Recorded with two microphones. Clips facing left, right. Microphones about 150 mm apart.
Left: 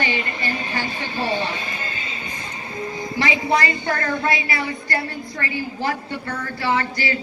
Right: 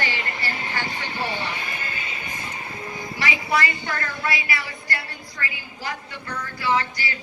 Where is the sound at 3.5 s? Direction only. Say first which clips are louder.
Left 2 dB; 45° left (ahead or behind).